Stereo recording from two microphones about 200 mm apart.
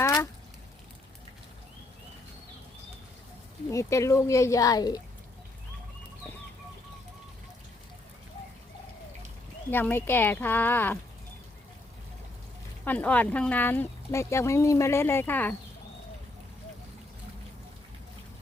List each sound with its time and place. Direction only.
0.0 s a sound: 15° left (ahead or behind)
3.7 s speech: 15° left (ahead or behind)
9.6 s speech: 10° left (ahead or behind)
12.8 s speech: 10° left (ahead or behind)